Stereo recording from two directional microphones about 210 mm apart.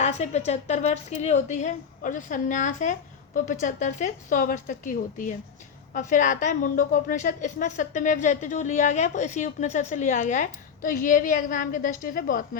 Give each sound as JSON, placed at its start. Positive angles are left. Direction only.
{"t": 0.0, "sound": "a woman's voice", "side_deg": 30}